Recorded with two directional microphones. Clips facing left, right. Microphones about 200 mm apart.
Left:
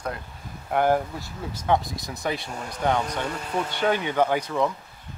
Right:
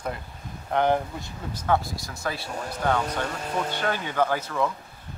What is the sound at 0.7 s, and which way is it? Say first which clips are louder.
Speech: left 1 dB; 5° left (ahead or behind).